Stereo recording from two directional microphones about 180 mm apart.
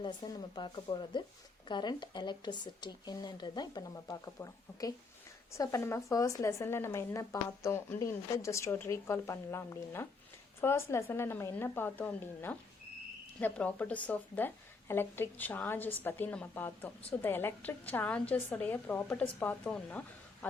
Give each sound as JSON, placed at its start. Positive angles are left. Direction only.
{"t": 0.0, "sound": "speech", "side_deg": 25}